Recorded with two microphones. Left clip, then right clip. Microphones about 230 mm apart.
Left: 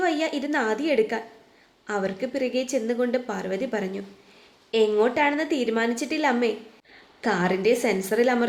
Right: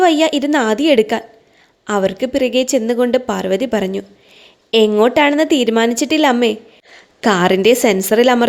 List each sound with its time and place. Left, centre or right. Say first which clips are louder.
0.0 s a woman's voice: right 12 dB; right